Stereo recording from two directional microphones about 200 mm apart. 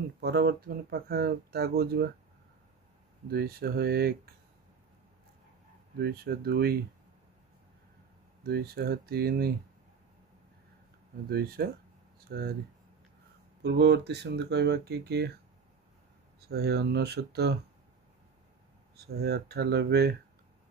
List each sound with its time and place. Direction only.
0.2 s speech: 50° right (ahead or behind)
3.3 s speech: 50° right (ahead or behind)
5.9 s speech: 50° right (ahead or behind)
8.5 s speech: 50° right (ahead or behind)
11.2 s speech: 50° right (ahead or behind)
13.6 s speech: 55° right (ahead or behind)
16.3 s speech: 55° right (ahead or behind)
18.9 s speech: 55° right (ahead or behind)